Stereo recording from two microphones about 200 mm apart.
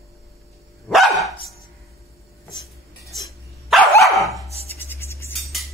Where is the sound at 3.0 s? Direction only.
Centre (ahead or behind).